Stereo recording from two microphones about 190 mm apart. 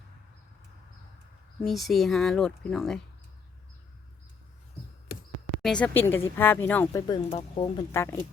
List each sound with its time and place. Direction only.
1.6 s speech: centre (ahead or behind)
5.6 s speech: 5° left (ahead or behind)
7.1 s speech: 25° left (ahead or behind)
7.8 s speech: 15° left (ahead or behind)